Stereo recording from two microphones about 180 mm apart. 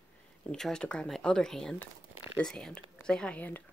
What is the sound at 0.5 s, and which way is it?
Speech, 5° left (ahead or behind).